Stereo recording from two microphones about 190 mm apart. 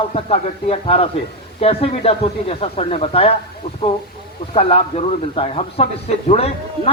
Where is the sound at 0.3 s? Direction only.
30° left (ahead or behind).